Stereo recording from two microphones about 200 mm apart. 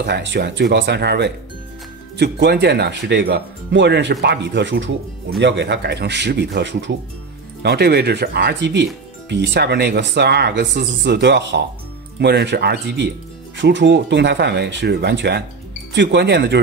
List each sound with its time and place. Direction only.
0.0 s speech: 60° right (ahead or behind)
7.6 s speech: 55° right (ahead or behind)